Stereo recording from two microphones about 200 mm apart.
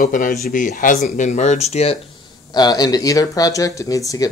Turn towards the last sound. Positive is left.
turn(degrees=15)  # may be behind; listen again after turning